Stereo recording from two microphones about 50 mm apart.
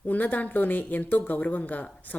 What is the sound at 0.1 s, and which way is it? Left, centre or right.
Speech, left.